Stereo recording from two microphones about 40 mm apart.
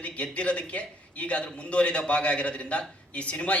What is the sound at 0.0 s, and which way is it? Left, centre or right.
A man's voice, left.